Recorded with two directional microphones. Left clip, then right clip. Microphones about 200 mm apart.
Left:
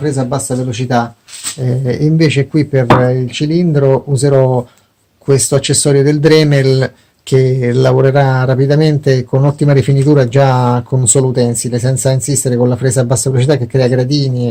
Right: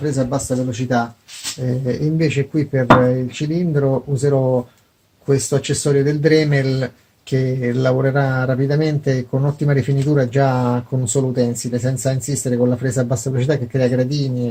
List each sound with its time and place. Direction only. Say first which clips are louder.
0.0 s speech: left 4 dB; 30° left (ahead or behind)
2.1 s speech: left 8 dB; 45° left (ahead or behind)